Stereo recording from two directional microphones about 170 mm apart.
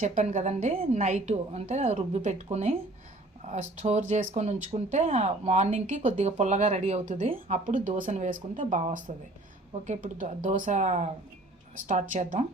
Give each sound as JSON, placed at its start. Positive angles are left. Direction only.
{"t": 0.0, "sound": "a woman's voice", "side_deg": -45}